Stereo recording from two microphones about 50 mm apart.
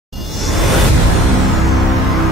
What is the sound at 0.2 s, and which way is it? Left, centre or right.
Music, centre.